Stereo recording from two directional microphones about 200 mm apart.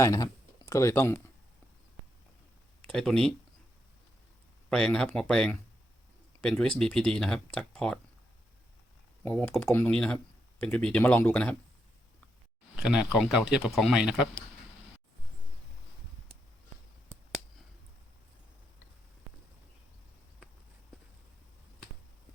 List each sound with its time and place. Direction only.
0.0 s speech: 15° left (ahead or behind)
2.8 s speech: centre (ahead or behind)
4.7 s speech: 5° left (ahead or behind)
9.2 s speech: 10° left (ahead or behind)
12.7 s speech: 5° right (ahead or behind)